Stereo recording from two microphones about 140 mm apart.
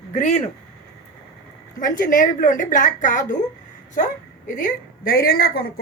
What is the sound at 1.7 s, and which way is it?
A woman's voice, 70° left (ahead or behind).